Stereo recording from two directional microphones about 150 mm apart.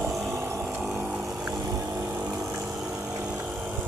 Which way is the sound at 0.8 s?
5° right (ahead or behind).